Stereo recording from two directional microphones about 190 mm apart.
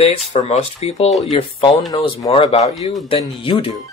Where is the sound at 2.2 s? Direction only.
30° left (ahead or behind).